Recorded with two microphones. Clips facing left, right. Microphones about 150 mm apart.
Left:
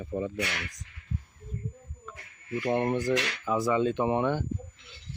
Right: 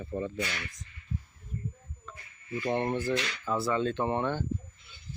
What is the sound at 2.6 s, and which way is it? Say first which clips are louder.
Speech: left 3 dB; 10° left (ahead or behind).